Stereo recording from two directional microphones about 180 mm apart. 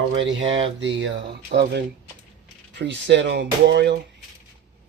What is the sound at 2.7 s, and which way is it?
Speech, 80° right.